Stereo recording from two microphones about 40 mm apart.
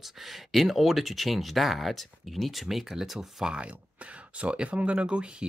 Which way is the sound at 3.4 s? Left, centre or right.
Right.